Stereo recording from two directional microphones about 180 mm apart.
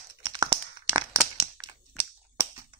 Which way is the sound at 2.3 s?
15° right (ahead or behind).